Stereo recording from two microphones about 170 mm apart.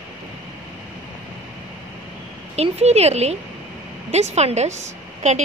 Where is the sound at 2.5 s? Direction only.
40° right (ahead or behind).